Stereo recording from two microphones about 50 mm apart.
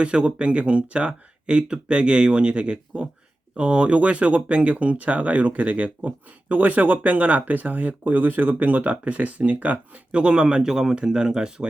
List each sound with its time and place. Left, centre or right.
0.0 s speech: right